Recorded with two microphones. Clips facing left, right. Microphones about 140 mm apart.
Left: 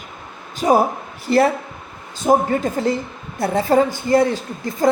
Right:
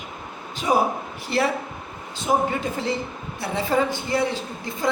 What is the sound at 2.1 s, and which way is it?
A woman's voice, 45° left (ahead or behind).